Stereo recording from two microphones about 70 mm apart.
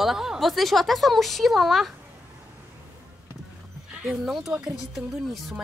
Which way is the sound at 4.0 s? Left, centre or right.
Centre.